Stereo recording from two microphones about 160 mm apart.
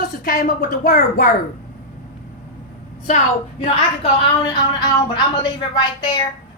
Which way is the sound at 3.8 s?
30° left (ahead or behind).